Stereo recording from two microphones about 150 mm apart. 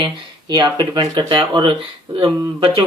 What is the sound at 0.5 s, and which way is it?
Speech, 30° right (ahead or behind).